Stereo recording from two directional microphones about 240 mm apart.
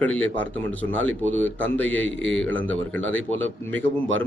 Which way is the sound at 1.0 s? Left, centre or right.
Right.